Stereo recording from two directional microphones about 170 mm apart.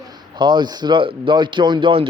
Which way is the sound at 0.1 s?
25° right (ahead or behind).